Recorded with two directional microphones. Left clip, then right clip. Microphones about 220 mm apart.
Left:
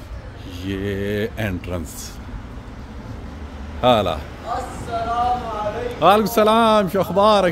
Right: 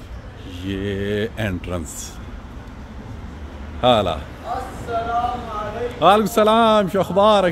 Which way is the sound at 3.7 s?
5° right (ahead or behind).